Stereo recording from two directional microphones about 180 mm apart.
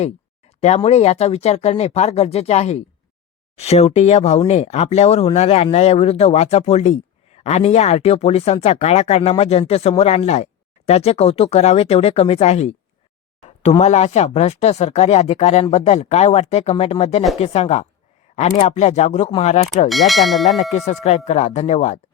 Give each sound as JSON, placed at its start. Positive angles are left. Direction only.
{"t": 0.6, "sound": "speech", "side_deg": 35}
{"t": 19.9, "sound": "speech", "side_deg": 0}
{"t": 20.6, "sound": "speech", "side_deg": 40}